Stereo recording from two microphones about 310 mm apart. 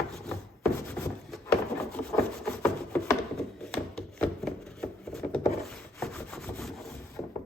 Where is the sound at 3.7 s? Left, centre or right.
Centre.